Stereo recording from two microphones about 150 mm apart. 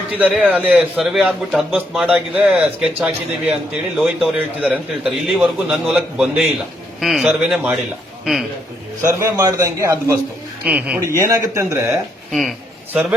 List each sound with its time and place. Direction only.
0.1 s a man's voice: 10° right (ahead or behind)
9.0 s a man's voice: 20° right (ahead or behind)
10.7 s a man's voice: 10° right (ahead or behind)
12.3 s a man's voice: centre (ahead or behind)
12.9 s a man's voice: 10° right (ahead or behind)